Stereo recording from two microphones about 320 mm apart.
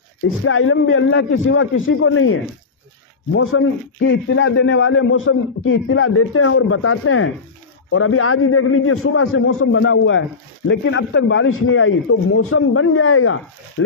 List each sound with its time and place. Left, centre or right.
0.5 s a man's voice: left
3.3 s a man's voice: left